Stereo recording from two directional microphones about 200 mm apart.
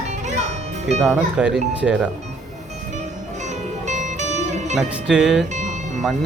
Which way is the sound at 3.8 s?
35° right (ahead or behind).